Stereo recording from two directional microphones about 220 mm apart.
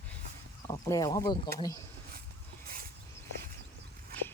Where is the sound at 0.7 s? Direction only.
15° left (ahead or behind).